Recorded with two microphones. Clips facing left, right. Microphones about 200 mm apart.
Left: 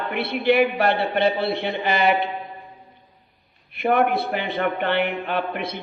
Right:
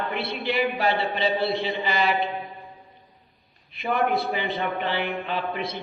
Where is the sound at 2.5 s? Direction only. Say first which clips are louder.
Left 2 dB; centre (ahead or behind).